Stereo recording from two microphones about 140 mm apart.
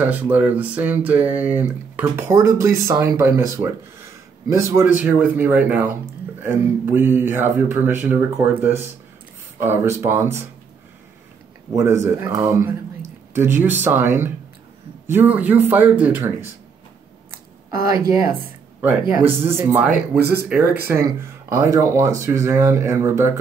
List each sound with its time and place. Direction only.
0.0 s speech: 10° right (ahead or behind)
11.7 s speech: 20° right (ahead or behind)
17.8 s speech: 20° right (ahead or behind)
18.8 s speech: 10° right (ahead or behind)